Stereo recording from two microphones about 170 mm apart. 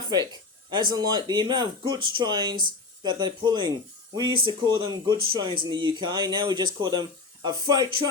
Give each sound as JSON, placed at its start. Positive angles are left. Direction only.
{"t": 0.7, "sound": "speech", "side_deg": -25}